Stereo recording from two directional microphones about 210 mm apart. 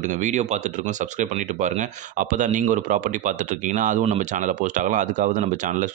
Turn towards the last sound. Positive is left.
turn(degrees=-35)  # may be behind; listen again after turning